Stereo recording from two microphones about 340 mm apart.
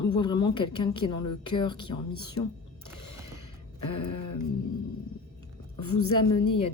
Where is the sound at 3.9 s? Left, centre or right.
Left.